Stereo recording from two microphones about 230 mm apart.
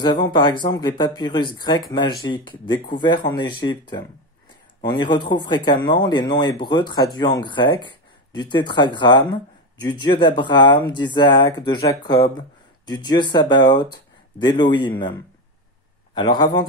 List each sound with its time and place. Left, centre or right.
0.0 s speech: centre
16.2 s speech: centre